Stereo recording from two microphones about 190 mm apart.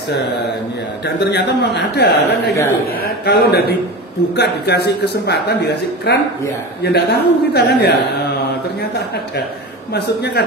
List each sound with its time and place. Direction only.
1.0 s speech: 60° left (ahead or behind)
9.9 s speech: 60° left (ahead or behind)